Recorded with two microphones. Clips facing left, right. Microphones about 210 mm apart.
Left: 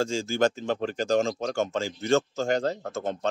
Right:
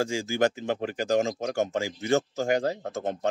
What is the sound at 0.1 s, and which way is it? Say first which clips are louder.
Speech: left 1 dB; 15° right (ahead or behind).